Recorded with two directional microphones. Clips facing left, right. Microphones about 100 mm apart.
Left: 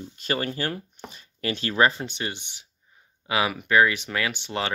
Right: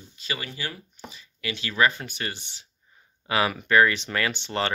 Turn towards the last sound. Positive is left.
turn(degrees=5)  # may be behind; listen again after turning